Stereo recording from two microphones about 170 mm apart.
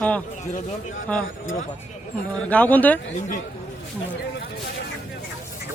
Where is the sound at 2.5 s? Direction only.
10° left (ahead or behind).